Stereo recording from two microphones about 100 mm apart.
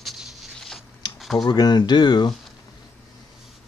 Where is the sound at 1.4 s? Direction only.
45° left (ahead or behind).